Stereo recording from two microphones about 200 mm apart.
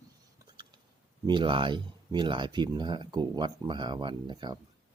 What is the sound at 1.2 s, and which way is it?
Speech, 25° right (ahead or behind).